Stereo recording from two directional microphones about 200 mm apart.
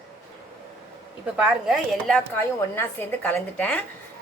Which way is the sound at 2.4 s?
10° left (ahead or behind).